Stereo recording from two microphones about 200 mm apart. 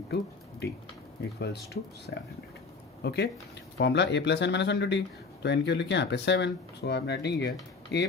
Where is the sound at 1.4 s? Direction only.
55° left (ahead or behind).